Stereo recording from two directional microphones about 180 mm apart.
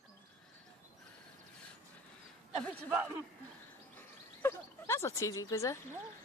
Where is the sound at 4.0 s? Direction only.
15° left (ahead or behind).